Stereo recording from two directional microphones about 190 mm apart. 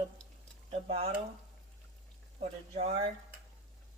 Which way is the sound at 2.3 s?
35° right (ahead or behind).